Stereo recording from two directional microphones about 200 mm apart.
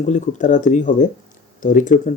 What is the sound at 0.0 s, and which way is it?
Speech, 35° left (ahead or behind).